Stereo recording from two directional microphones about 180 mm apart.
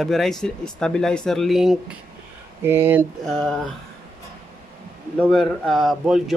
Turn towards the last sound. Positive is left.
turn(degrees=0)  # may be behind; listen again after turning